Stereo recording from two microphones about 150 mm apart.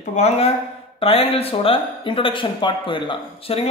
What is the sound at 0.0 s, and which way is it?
Speech, 50° left (ahead or behind).